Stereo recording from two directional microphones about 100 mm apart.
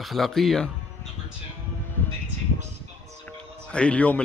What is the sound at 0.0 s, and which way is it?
Speech, centre (ahead or behind).